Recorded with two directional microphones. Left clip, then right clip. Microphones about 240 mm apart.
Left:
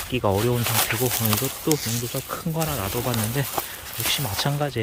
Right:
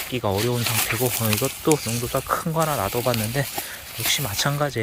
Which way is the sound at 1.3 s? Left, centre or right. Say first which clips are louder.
Right 3 dB; left.